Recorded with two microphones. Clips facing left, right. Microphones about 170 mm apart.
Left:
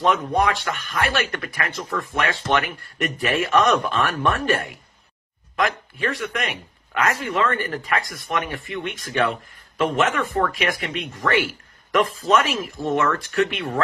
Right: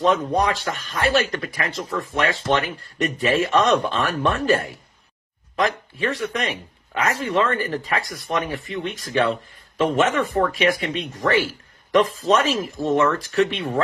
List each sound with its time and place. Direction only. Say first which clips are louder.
0.0 s speech: right 1 dB; 35° right (ahead or behind)